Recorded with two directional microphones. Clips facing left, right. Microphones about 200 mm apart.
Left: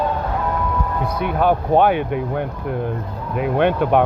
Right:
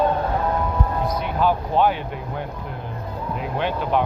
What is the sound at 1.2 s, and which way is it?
Speech, 55° left (ahead or behind).